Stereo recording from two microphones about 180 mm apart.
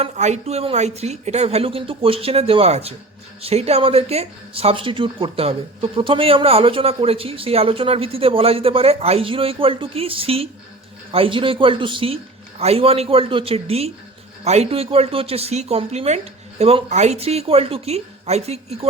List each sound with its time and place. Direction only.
0.0 s speech: 40° right (ahead or behind)